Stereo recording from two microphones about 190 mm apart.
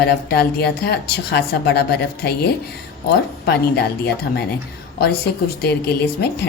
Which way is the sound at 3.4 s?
55° left (ahead or behind).